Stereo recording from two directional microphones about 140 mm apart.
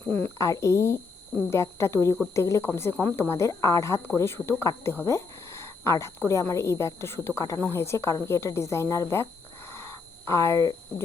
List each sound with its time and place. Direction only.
0.1 s speech: 20° left (ahead or behind)
10.2 s speech: 20° left (ahead or behind)